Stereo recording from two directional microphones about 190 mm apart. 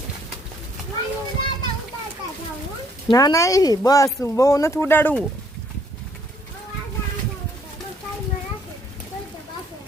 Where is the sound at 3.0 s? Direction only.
20° left (ahead or behind).